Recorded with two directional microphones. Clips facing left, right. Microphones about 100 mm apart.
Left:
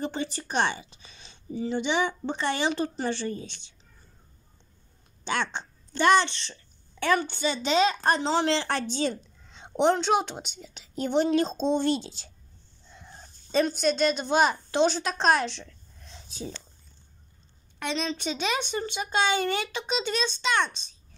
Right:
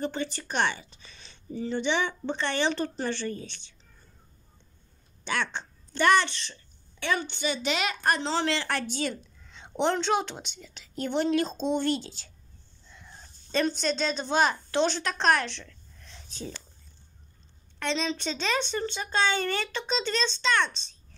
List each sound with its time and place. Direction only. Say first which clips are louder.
0.0 s speech: even; 20° left (ahead or behind)
5.2 s a woman's voice: left 1 dB; 20° left (ahead or behind)
12.9 s a sound: left 2 dB; 25° left (ahead or behind)
13.6 s a woman's voice: left 3 dB; 10° left (ahead or behind)
17.7 s speech: right 1 dB; 10° left (ahead or behind)